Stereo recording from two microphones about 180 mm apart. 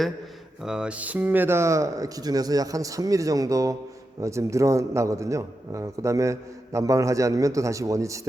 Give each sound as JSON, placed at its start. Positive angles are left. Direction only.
{"t": 0.6, "sound": "a man's voice", "side_deg": -5}